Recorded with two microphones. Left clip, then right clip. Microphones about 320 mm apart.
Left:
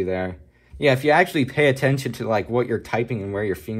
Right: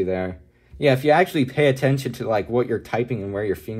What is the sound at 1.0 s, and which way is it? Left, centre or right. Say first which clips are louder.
Speech: even; centre.